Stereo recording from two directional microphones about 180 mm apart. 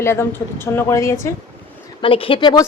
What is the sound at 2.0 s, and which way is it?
Speech, 30° left (ahead or behind).